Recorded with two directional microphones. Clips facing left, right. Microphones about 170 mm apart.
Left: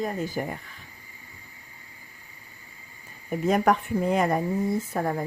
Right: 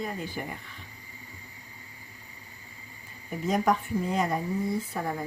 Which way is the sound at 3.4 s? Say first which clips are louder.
Left 4 dB; 60° left (ahead or behind).